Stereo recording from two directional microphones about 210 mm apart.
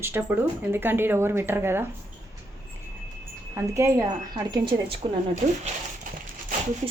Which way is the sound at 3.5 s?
15° right (ahead or behind).